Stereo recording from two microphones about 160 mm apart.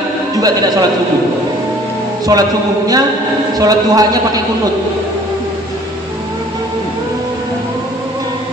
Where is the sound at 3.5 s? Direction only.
25° right (ahead or behind).